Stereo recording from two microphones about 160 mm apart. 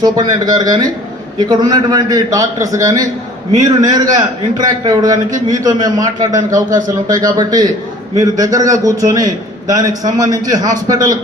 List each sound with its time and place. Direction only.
0.0 s a man's voice: 25° right (ahead or behind)